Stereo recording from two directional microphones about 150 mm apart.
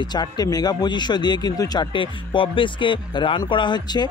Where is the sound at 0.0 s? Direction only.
30° left (ahead or behind).